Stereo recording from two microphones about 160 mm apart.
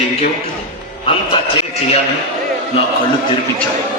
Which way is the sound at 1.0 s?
30° left (ahead or behind).